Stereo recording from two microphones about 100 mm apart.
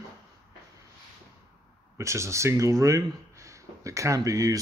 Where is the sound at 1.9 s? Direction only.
30° right (ahead or behind).